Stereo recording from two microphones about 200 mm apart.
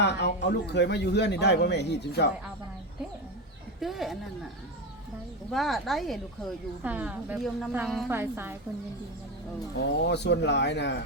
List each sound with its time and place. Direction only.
0.0 s a sound: 60° left (ahead or behind)
0.4 s speech: 60° left (ahead or behind)
3.8 s speech: centre (ahead or behind)
5.5 s a woman's voice: centre (ahead or behind)
8.1 s a woman's voice: 10° right (ahead or behind)
9.7 s speech: 60° left (ahead or behind)